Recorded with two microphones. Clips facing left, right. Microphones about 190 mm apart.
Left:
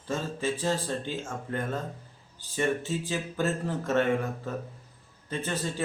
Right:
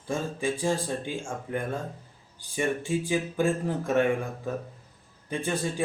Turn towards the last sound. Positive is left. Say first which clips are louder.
# right 3 dB
turn(degrees=-15)  # may be behind; listen again after turning